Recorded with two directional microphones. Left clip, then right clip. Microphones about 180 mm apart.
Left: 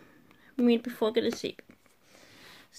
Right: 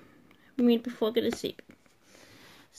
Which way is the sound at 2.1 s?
15° left (ahead or behind).